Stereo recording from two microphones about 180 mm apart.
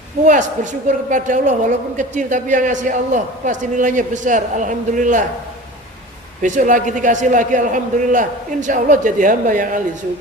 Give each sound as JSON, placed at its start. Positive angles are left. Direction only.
{"t": 0.3, "sound": "a man's voice", "side_deg": -45}
{"t": 6.4, "sound": "a man's voice", "side_deg": -45}